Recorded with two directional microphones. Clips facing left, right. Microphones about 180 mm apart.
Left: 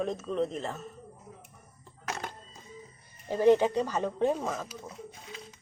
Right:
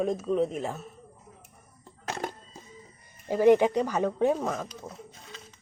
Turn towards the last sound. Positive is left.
turn(degrees=-10)  # may be behind; listen again after turning